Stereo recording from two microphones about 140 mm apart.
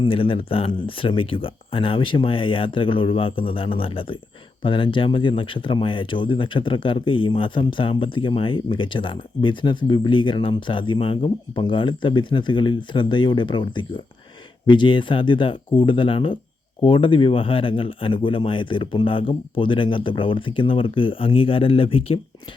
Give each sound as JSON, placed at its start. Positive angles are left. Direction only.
{"t": 0.0, "sound": "speech", "side_deg": 40}